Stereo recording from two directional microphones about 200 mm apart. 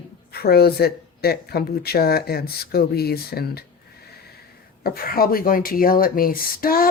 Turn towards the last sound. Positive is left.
turn(degrees=45)  # may be behind; listen again after turning